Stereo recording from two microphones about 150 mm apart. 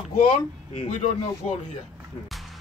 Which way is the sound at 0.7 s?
50° left (ahead or behind).